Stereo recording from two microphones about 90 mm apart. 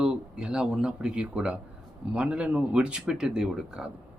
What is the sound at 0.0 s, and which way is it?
Speech, 10° right (ahead or behind).